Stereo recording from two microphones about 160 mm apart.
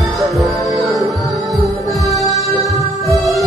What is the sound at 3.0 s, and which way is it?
Music, centre (ahead or behind).